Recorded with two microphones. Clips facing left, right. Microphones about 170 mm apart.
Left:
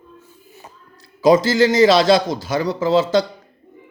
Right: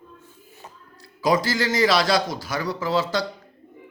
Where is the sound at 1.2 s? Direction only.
25° left (ahead or behind).